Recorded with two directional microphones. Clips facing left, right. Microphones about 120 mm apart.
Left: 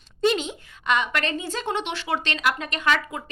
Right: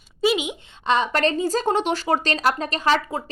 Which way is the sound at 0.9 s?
35° right (ahead or behind).